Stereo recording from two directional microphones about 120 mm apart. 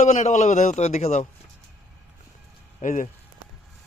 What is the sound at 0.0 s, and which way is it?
A man's voice, 90° left.